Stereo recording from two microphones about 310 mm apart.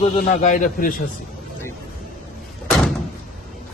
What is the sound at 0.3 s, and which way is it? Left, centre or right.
Speech, left.